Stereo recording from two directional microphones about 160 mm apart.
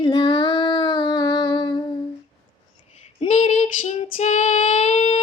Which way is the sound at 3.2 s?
45° left (ahead or behind).